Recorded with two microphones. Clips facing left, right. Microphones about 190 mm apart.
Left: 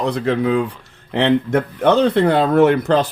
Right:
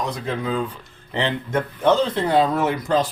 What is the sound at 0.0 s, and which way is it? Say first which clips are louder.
Speech: left 8 dB; 65° left (ahead or behind).